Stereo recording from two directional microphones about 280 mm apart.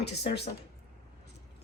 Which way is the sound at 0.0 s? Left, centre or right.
Left.